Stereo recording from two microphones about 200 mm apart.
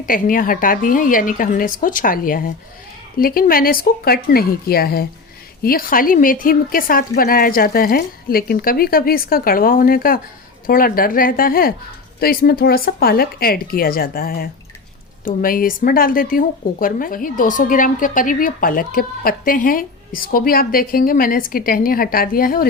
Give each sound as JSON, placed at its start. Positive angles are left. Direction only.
{"t": 0.0, "sound": "speech", "side_deg": 45}